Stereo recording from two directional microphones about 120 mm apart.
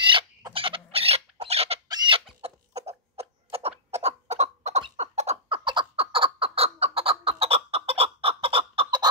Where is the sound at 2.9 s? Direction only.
55° right (ahead or behind).